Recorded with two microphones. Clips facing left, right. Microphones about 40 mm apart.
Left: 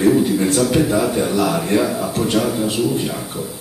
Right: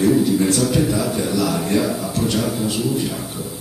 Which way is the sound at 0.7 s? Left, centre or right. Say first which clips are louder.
Left 3 dB; left.